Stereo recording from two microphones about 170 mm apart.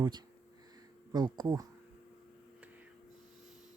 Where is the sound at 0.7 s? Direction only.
25° right (ahead or behind).